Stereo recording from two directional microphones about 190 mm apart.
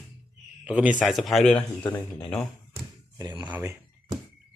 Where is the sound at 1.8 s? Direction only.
20° left (ahead or behind).